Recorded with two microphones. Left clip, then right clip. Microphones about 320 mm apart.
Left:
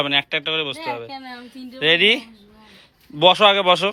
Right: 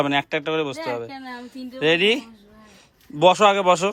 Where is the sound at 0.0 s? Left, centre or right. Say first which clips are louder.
Left 2 dB; centre.